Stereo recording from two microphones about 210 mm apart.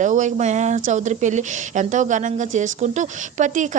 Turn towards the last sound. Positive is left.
turn(degrees=-35)  # may be behind; listen again after turning